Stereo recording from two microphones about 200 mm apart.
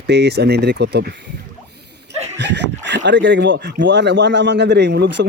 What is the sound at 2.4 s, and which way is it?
Speech, 60° right (ahead or behind).